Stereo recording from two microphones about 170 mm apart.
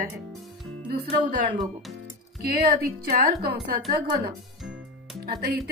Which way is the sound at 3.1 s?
65° right (ahead or behind).